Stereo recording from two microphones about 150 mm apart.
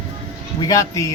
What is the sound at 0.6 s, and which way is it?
Speech, 25° left (ahead or behind).